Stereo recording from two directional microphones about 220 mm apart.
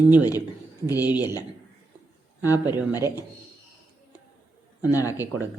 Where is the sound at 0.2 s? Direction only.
15° left (ahead or behind).